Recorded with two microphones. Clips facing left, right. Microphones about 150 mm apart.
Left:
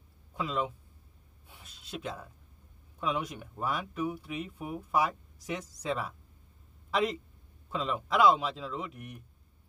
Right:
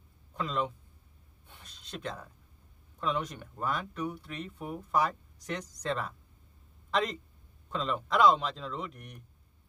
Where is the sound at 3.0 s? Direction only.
10° left (ahead or behind).